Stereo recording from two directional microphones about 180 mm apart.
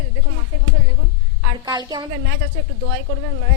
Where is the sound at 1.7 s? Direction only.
20° right (ahead or behind).